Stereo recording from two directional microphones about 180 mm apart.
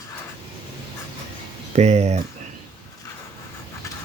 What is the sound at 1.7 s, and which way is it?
Speech, 40° right (ahead or behind).